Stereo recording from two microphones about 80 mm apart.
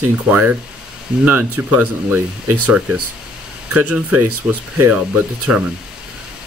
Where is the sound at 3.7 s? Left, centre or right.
Centre.